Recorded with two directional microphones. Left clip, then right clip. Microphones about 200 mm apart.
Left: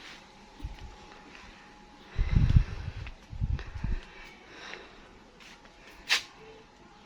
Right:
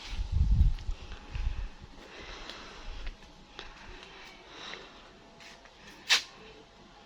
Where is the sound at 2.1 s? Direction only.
Centre (ahead or behind).